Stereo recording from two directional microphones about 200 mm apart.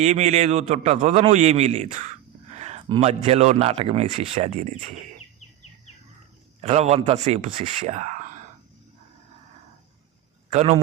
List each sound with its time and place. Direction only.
0.0 s speech: 35° right (ahead or behind)
6.6 s speech: 35° right (ahead or behind)
10.5 s speech: 35° right (ahead or behind)